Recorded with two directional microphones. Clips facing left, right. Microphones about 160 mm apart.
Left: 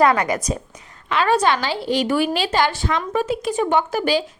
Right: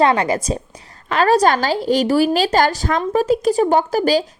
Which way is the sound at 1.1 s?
40° right (ahead or behind).